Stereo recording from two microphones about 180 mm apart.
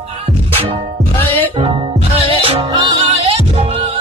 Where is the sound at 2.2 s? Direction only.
30° right (ahead or behind).